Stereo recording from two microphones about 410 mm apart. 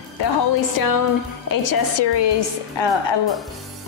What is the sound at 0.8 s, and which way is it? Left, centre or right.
A woman's voice, left.